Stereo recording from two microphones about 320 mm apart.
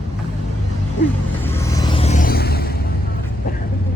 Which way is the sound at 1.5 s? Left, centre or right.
Centre.